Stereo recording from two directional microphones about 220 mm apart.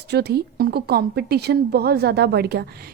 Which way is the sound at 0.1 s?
50° right (ahead or behind).